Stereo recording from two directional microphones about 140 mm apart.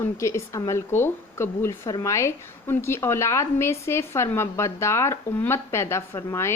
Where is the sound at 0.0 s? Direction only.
20° left (ahead or behind).